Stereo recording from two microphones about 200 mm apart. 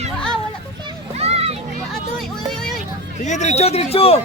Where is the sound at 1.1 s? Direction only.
30° right (ahead or behind).